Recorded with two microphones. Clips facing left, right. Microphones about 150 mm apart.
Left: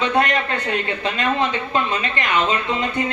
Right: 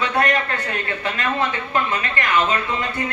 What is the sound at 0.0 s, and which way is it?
Speech, 20° left (ahead or behind).